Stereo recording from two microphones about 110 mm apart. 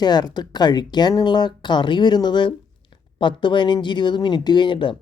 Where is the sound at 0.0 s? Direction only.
40° left (ahead or behind).